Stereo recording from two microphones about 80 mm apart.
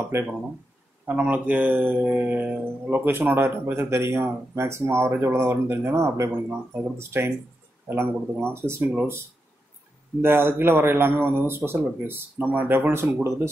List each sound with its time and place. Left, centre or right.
0.1 s speech: right
1.0 s speech: centre
10.2 s speech: right